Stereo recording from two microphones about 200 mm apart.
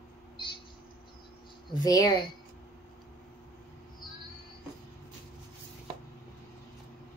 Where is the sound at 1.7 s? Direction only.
20° left (ahead or behind).